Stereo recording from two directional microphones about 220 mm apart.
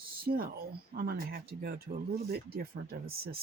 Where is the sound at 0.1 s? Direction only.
45° right (ahead or behind).